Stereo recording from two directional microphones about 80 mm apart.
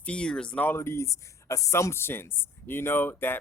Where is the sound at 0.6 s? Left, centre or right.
Left.